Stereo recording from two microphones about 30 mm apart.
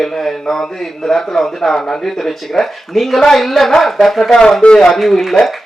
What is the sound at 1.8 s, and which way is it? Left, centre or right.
Speech, left.